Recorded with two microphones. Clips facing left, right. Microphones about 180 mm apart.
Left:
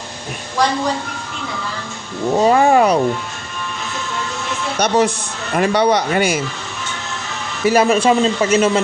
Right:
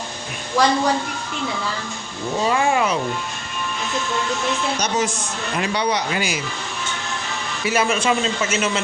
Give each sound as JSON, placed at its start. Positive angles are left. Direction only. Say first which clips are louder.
{"t": 2.4, "sound": "speech", "louder": "left 7 dB", "side_deg": 40}
{"t": 4.8, "sound": "speech", "louder": "left 12 dB", "side_deg": 60}
{"t": 5.5, "sound": "speech", "louder": "left 8 dB", "side_deg": 50}
{"t": 7.6, "sound": "speech", "louder": "left 7 dB", "side_deg": 35}